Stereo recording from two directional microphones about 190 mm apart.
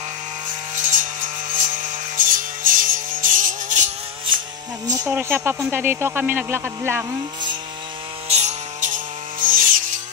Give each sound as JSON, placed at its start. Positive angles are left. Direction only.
{"t": 0.5, "sound": "music", "side_deg": -45}
{"t": 5.0, "sound": "speech", "side_deg": -10}
{"t": 8.3, "sound": "chainsaw", "side_deg": -35}